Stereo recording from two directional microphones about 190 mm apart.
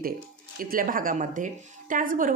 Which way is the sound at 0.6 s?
45° right (ahead or behind).